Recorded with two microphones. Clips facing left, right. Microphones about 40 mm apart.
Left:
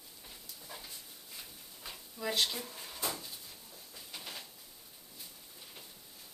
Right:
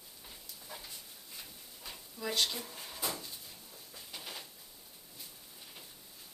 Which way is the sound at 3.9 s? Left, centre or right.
Centre.